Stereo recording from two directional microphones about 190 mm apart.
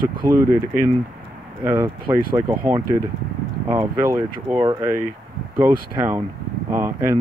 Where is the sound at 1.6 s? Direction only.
20° right (ahead or behind).